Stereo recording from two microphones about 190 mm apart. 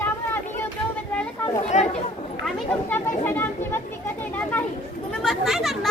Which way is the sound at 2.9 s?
10° left (ahead or behind).